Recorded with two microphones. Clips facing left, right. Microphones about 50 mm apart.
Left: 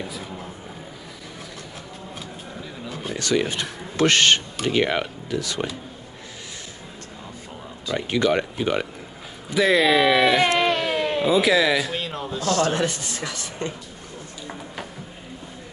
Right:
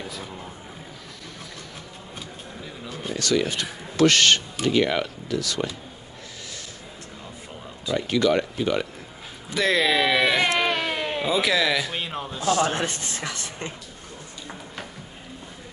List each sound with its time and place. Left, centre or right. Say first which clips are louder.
0.1 s a sound: left 2 dB; centre
2.9 s a sound: left 1 dB; centre
3.2 s speech: left 1 dB; left
7.9 s speech: even; left
9.5 s speech: left 4 dB; centre
10.6 s baby cry: left 3 dB; centre
11.2 s speech: left 4 dB; centre
11.9 s speech: left 2 dB; centre
12.7 s a woman's voice: left 3 dB; right